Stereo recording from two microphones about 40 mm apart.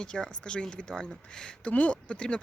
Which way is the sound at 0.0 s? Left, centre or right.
Left.